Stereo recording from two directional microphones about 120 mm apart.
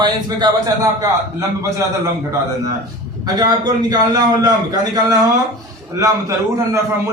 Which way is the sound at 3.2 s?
35° right (ahead or behind).